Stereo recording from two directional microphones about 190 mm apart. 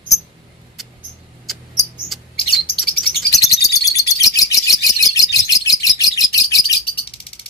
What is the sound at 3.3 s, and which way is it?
Bird, 15° left (ahead or behind).